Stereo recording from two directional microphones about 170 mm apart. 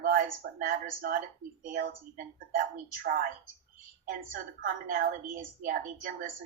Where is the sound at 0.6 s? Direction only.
60° right (ahead or behind).